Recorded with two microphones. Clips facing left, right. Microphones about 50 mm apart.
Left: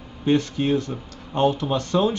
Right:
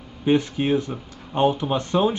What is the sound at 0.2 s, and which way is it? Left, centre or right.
Speech, centre.